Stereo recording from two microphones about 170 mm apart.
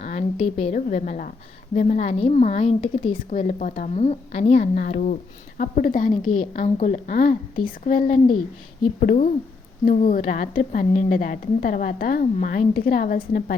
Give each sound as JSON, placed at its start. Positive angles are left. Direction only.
{"t": 0.0, "sound": "a woman's voice", "side_deg": 40}